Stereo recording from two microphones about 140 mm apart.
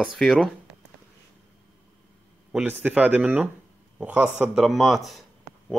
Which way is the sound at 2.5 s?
10° right (ahead or behind).